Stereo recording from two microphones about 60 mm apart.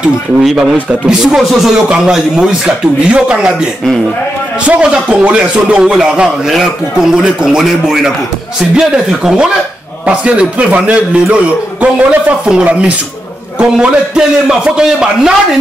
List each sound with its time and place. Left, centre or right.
1.2 s speech: centre
1.9 s a man's voice: centre
4.6 s a man's voice: right